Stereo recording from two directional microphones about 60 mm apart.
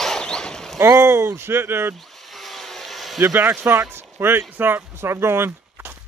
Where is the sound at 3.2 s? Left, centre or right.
Right.